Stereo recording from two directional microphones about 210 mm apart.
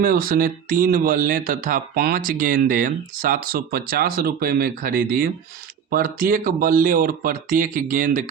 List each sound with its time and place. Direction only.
0.0 s speech: 45° right (ahead or behind)